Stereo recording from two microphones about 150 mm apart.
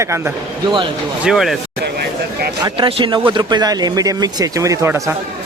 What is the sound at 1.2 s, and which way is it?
Speech, centre (ahead or behind).